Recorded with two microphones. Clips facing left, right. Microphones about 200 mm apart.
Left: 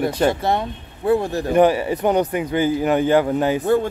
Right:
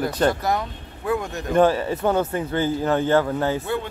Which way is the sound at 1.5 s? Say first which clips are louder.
Left 2 dB; 15° left (ahead or behind).